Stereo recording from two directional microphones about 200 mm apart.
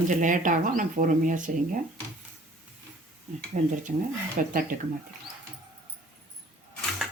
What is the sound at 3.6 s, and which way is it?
Speech, 40° right (ahead or behind).